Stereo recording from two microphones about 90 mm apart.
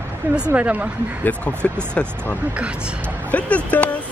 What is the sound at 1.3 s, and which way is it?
Speech, 15° left (ahead or behind).